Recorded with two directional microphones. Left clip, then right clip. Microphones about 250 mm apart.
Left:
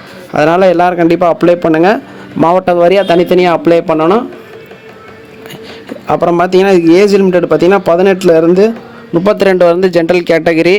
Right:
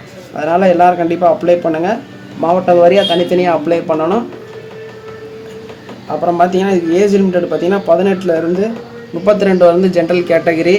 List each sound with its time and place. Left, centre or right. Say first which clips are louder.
0.3 s a man's voice: left 3 dB; left
6.3 s a man's voice: left 3 dB; left